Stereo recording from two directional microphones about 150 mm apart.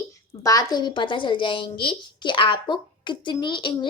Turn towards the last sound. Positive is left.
turn(degrees=35)  # may be behind; listen again after turning